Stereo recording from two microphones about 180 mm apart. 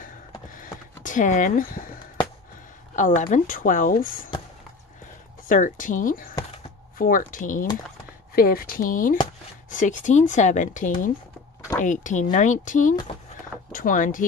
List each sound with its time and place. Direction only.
0.6 s a sound: 45° left (ahead or behind)
3.0 s speech: 45° left (ahead or behind)
5.5 s speech: 45° left (ahead or behind)